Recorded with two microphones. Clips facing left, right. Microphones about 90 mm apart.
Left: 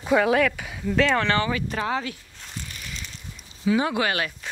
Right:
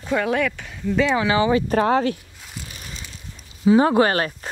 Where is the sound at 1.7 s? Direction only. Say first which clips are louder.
Right 9 dB; 45° right (ahead or behind).